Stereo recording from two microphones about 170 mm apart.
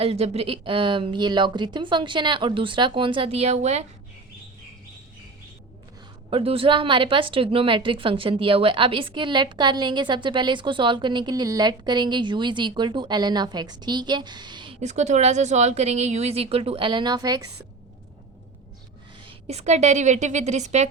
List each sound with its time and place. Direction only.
0.0 s speech: 35° right (ahead or behind)
6.3 s speech: 30° right (ahead or behind)
14.8 s a woman's voice: 45° right (ahead or behind); by 17.5 s 20° right (ahead or behind)
19.2 s a woman's voice: 40° right (ahead or behind)